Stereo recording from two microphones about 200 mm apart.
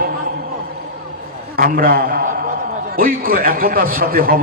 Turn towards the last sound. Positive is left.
turn(degrees=-45)  # may be behind; listen again after turning